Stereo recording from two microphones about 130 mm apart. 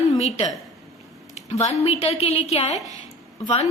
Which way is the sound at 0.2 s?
55° left (ahead or behind).